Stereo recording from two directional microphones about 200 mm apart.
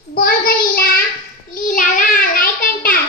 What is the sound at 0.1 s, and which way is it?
Child singing, 50° left (ahead or behind).